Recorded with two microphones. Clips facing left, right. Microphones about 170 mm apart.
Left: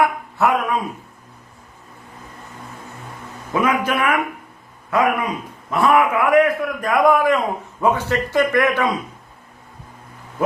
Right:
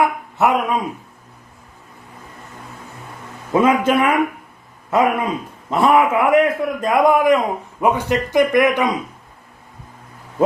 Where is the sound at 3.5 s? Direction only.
25° right (ahead or behind).